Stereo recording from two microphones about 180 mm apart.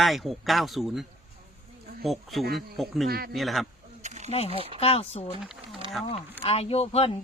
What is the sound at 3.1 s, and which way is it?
Speech, 60° right (ahead or behind).